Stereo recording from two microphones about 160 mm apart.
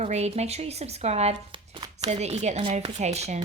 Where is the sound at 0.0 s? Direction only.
40° right (ahead or behind).